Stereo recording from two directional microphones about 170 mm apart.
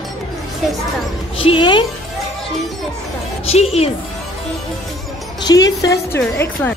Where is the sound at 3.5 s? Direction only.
35° left (ahead or behind).